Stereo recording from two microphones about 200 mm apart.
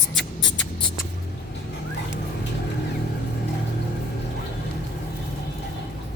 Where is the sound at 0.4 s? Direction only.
65° left (ahead or behind).